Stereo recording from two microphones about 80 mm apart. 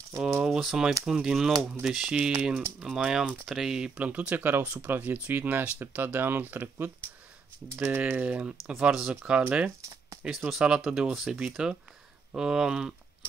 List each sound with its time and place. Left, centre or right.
0.4 s speech: centre; by 8.0 s right
8.1 s speech: centre
9.1 s speech: centre
9.8 s speech: right
10.6 s speech: centre